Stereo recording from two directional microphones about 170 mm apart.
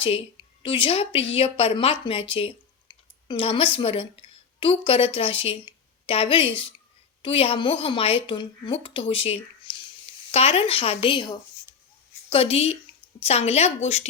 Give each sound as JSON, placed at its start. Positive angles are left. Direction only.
{"t": 0.6, "sound": "a woman's voice", "side_deg": 30}
{"t": 9.7, "sound": "a sound", "side_deg": 30}
{"t": 10.3, "sound": "a woman's voice", "side_deg": 35}